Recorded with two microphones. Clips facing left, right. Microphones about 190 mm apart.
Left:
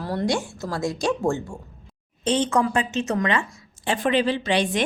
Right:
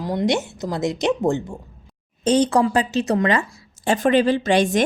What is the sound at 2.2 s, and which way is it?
A woman's voice, 40° right (ahead or behind).